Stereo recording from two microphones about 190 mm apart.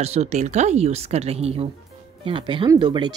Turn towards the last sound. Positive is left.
turn(degrees=-25)  # may be behind; listen again after turning